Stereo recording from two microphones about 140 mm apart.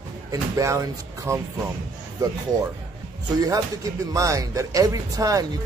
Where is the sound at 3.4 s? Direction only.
25° right (ahead or behind).